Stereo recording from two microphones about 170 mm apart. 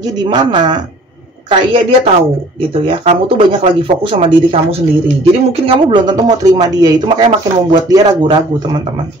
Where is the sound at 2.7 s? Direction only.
30° right (ahead or behind).